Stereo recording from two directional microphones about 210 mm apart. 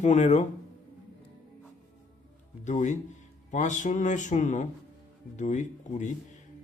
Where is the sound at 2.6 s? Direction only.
35° left (ahead or behind).